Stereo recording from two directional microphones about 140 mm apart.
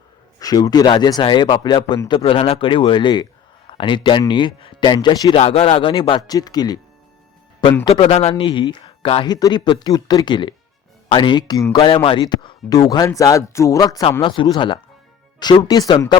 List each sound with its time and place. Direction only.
0.3 s speech: 25° left (ahead or behind)
5.4 s speech: 45° left (ahead or behind); by 6.7 s 30° left (ahead or behind)
7.9 s speech: 45° left (ahead or behind); by 11.8 s 25° left (ahead or behind)
11.8 s speech: 35° left (ahead or behind)
14.0 s speech: 40° left (ahead or behind)